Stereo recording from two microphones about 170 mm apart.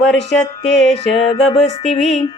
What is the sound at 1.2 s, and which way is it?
Music, 35° left (ahead or behind).